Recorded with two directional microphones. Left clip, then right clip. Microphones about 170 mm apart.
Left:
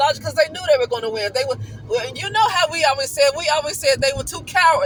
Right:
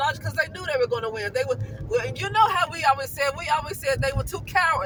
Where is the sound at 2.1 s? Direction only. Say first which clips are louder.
Left 2 dB; 35° left (ahead or behind).